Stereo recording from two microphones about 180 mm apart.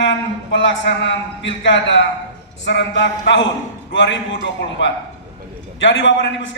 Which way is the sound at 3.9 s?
90° left.